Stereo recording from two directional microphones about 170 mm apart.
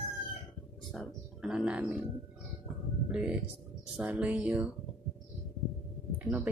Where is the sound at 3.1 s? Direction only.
5° right (ahead or behind).